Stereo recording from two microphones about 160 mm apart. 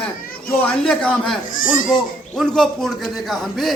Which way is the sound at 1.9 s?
5° left (ahead or behind).